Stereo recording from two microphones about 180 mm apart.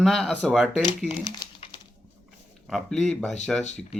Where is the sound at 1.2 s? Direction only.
30° left (ahead or behind).